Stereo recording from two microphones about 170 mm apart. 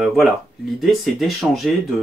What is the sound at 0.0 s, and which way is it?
Speech, centre (ahead or behind).